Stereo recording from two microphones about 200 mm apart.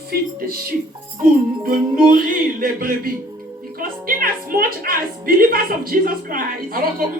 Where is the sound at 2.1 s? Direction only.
45° right (ahead or behind).